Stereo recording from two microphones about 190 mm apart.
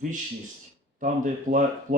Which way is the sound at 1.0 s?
40° right (ahead or behind).